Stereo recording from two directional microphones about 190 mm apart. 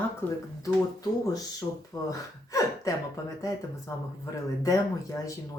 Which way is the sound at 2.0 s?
20° left (ahead or behind).